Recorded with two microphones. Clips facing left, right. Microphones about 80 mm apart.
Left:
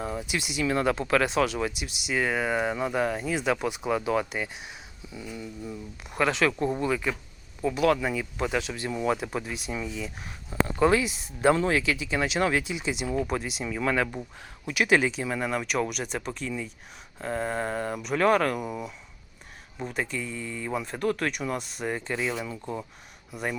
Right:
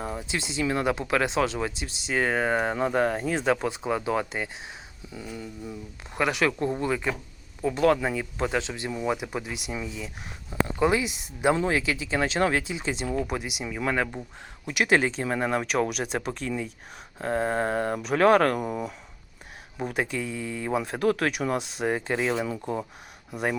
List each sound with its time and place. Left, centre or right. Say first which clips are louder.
0.0 s speech: even; right
6.1 s speech: even; centre
8.9 s speech: left 2 dB; centre; by 13.1 s right
13.2 s speech: left 1 dB; centre
14.7 s speech: even; right
19.9 s speech: right 2 dB; right
22.1 s speech: right 2 dB; right